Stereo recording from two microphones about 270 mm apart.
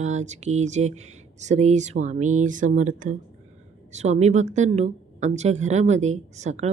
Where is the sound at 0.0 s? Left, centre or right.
Right.